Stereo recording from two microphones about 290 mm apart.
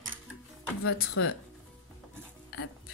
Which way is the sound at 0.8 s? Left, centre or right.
Left.